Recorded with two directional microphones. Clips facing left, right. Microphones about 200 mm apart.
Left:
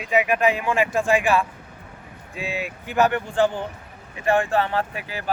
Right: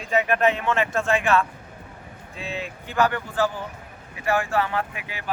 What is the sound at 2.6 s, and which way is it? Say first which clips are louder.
Speech: left 2 dB; 15° left (ahead or behind).